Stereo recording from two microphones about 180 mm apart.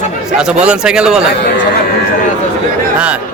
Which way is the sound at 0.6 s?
5° right (ahead or behind).